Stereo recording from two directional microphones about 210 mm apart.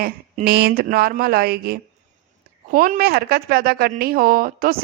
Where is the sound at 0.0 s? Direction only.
45° right (ahead or behind).